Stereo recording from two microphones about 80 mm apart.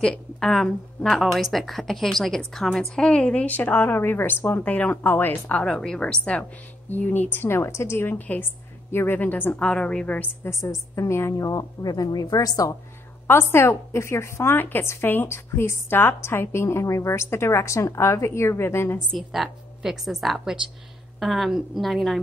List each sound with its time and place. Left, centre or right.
0.0 s a woman's voice: centre
6.9 s a woman's voice: left
10.4 s a woman's voice: left
13.3 s a woman's voice: left
19.1 s a woman's voice: centre